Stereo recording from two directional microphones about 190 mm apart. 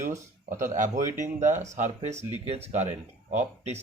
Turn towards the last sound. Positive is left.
turn(degrees=-35)  # may be behind; listen again after turning